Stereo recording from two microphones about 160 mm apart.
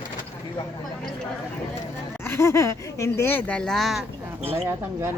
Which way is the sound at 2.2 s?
15° left (ahead or behind).